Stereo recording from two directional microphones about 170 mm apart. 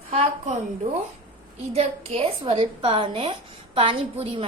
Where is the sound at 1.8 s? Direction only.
40° right (ahead or behind).